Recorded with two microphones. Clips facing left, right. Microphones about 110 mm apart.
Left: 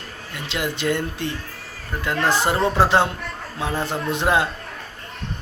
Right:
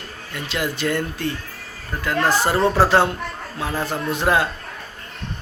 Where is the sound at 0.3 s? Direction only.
20° left (ahead or behind).